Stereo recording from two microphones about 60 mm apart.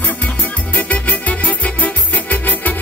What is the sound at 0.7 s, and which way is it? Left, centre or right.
Music, left.